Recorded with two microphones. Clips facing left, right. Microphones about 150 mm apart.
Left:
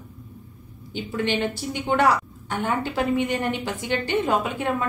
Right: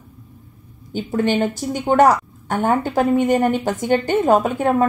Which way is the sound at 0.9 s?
45° right (ahead or behind).